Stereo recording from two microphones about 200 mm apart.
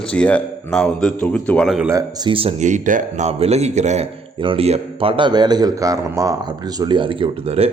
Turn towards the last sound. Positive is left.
turn(degrees=-30)  # may be behind; listen again after turning